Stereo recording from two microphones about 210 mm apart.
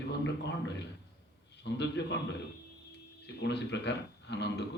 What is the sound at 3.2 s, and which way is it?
Speech, 55° left (ahead or behind).